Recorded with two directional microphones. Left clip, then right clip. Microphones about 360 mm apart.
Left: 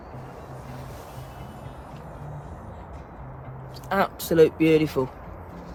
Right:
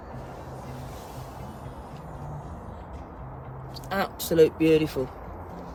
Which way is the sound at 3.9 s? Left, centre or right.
Centre.